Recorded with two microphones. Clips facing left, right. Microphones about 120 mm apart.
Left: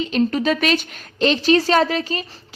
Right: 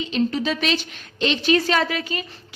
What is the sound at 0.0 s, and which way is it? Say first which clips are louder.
A woman's voice: left 3 dB; 50° left (ahead or behind).